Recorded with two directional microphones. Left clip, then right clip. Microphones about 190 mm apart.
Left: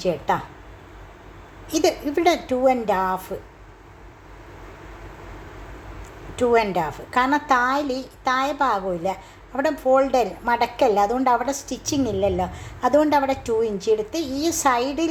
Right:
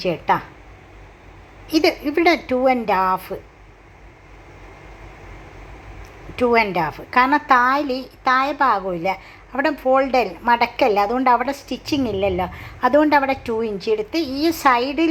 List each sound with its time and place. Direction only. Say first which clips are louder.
0.0 s a woman's voice: right 3 dB; 15° right (ahead or behind)
1.7 s a woman's voice: right 3 dB; 10° right (ahead or behind)
6.4 s a woman's voice: right 2 dB; 15° right (ahead or behind)